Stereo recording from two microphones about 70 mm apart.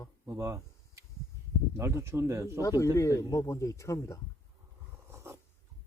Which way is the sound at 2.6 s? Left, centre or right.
Left.